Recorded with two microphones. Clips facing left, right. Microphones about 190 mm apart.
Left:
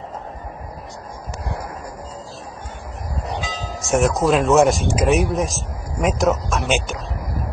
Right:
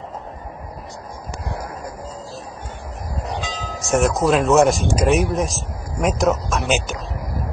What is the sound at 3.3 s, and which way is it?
Speech, centre (ahead or behind).